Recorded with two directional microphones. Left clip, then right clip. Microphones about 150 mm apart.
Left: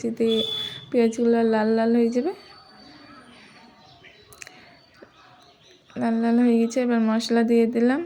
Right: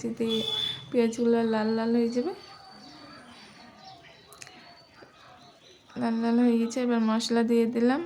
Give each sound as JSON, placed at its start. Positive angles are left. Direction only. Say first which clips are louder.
{"t": 0.0, "sound": "speech", "louder": "left 6 dB", "side_deg": 25}
{"t": 5.9, "sound": "speech", "louder": "left 5 dB", "side_deg": 25}